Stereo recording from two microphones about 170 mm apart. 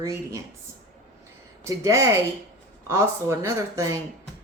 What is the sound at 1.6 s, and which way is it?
Speech, 20° right (ahead or behind).